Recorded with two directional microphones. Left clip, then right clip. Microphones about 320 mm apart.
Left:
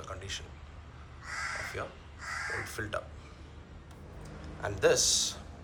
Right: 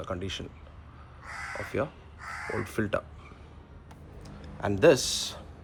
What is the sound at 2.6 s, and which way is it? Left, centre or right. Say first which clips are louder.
Speech: right 6 dB; right.